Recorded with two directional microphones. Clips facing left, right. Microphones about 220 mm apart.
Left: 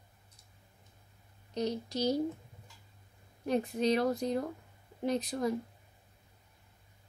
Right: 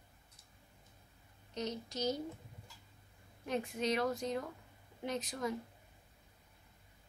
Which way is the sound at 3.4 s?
35° left (ahead or behind).